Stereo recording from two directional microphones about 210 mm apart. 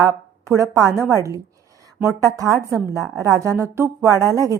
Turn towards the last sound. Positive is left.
turn(degrees=-15)  # may be behind; listen again after turning